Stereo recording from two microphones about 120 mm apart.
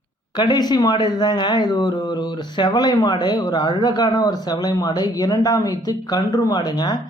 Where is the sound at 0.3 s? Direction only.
35° left (ahead or behind).